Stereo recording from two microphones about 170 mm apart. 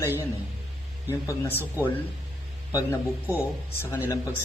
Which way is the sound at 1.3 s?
15° left (ahead or behind).